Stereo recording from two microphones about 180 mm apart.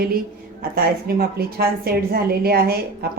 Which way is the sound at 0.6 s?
55° right (ahead or behind).